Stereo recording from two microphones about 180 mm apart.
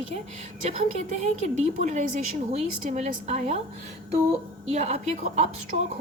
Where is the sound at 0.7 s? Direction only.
40° right (ahead or behind).